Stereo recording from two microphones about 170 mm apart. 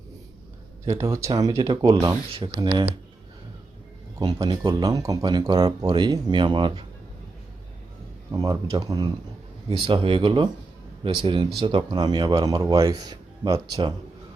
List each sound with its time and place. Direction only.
0.9 s speech: 20° right (ahead or behind)
2.3 s speech: 30° right (ahead or behind)
4.2 s speech: 25° right (ahead or behind)
8.3 s speech: 20° right (ahead or behind)